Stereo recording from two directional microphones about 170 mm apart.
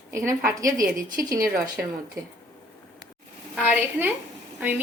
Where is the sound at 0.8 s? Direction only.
55° right (ahead or behind).